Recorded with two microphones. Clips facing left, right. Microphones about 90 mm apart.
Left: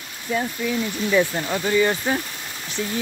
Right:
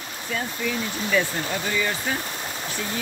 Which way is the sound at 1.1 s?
25° left (ahead or behind).